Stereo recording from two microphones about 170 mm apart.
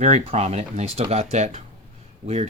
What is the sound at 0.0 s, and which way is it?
Speech, 40° right (ahead or behind).